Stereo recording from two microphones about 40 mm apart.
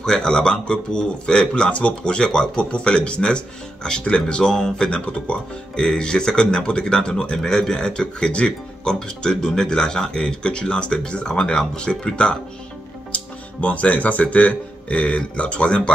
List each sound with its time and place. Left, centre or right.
0.0 s speech: centre
7.3 s speech: centre; by 15.9 s left